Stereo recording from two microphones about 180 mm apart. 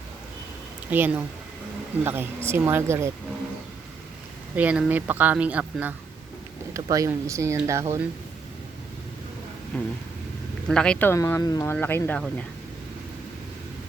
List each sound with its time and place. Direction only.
0.9 s speech: 10° right (ahead or behind)
2.5 s speech: 15° right (ahead or behind)
4.5 s speech: 10° right (ahead or behind)
6.7 s speech: 20° right (ahead or behind)
9.7 s speech: 5° left (ahead or behind)
11.1 s speech: 15° left (ahead or behind)